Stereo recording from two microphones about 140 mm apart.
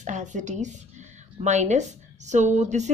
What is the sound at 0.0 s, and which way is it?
A woman's voice, 60° right (ahead or behind).